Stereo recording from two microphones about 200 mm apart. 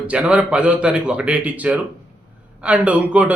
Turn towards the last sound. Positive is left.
turn(degrees=-5)  # may be behind; listen again after turning